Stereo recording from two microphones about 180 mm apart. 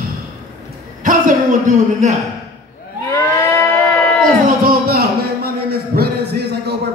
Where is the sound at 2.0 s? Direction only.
40° right (ahead or behind).